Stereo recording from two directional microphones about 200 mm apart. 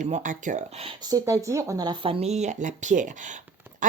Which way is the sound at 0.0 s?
40° right (ahead or behind).